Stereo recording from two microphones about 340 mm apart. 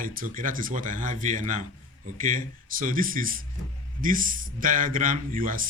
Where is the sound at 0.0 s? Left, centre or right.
Right.